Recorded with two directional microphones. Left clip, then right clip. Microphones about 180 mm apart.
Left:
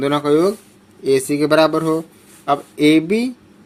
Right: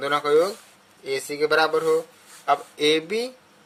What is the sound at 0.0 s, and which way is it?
Speech, 25° left (ahead or behind).